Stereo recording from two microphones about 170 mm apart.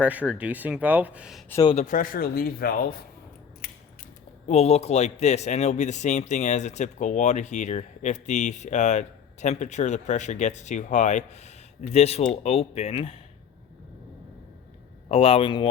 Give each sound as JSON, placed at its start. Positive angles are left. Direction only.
{"t": 0.0, "sound": "speech", "side_deg": -10}
{"t": 1.7, "sound": "a man's voice", "side_deg": 45}
{"t": 4.4, "sound": "a man's voice", "side_deg": 40}
{"t": 15.1, "sound": "a man's voice", "side_deg": 35}